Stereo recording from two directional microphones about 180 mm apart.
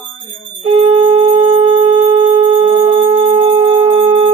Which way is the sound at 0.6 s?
25° right (ahead or behind).